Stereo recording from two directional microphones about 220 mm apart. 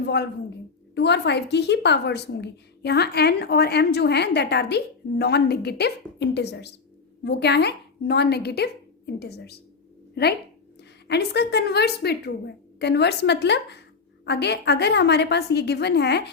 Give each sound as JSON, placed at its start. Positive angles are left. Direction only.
{"t": 0.0, "sound": "a sound", "side_deg": 50}
{"t": 0.9, "sound": "a woman's voice", "side_deg": 50}
{"t": 11.1, "sound": "a woman's voice", "side_deg": 50}